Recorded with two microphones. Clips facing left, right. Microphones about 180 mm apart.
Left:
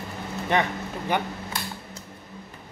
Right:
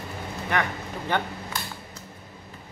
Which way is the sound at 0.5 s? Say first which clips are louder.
Left 3 dB; 20° left (ahead or behind).